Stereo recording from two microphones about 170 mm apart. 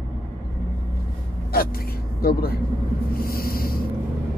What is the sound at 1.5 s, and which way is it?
Vehicle, 60° left (ahead or behind).